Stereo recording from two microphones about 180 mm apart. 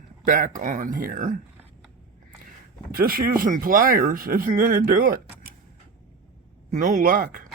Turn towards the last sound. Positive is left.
turn(degrees=-50)  # may be behind; listen again after turning